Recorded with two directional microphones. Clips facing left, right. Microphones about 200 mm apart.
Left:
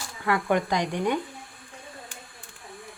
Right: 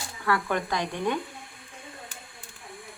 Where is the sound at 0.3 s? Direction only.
20° left (ahead or behind).